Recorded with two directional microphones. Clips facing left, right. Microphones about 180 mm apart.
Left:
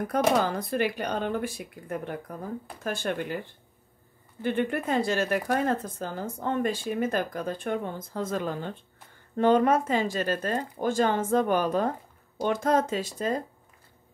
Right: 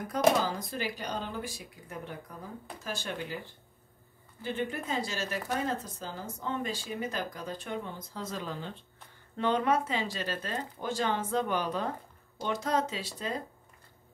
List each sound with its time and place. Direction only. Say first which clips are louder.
0.0 s speech: left 2 dB; 60° left (ahead or behind)